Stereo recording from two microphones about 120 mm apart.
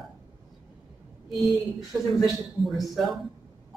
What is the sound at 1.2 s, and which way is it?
Speech, centre (ahead or behind).